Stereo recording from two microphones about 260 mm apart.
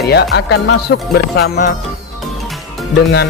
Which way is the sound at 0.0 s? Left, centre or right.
Left.